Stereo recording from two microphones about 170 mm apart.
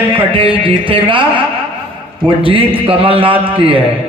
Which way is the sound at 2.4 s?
30° right (ahead or behind).